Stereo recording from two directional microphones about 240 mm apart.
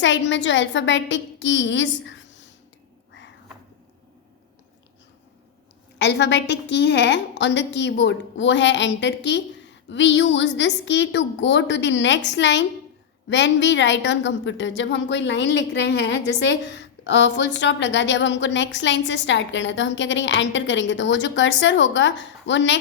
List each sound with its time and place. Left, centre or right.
0.0 s a woman's voice: left
6.0 s a woman's voice: left